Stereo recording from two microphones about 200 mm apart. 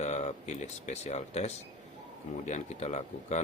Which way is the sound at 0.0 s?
35° left (ahead or behind).